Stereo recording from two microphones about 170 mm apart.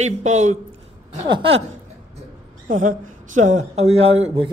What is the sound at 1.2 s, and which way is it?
Speech, 30° right (ahead or behind).